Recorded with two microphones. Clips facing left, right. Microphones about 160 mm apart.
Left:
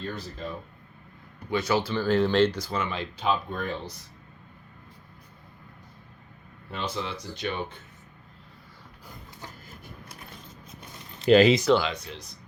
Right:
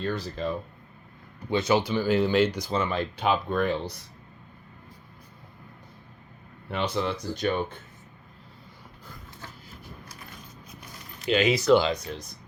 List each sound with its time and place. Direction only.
0.0 s speech: 70° right (ahead or behind)
1.5 s speech: 25° right (ahead or behind)
2.7 s speech: 35° right (ahead or behind)
3.0 s speech: 65° right (ahead or behind)
6.7 s speech: 65° right (ahead or behind); by 7.8 s 45° right (ahead or behind)
10.7 s zipper: 25° left (ahead or behind)
11.3 s speech: 35° left (ahead or behind)
11.8 s speech: 40° right (ahead or behind)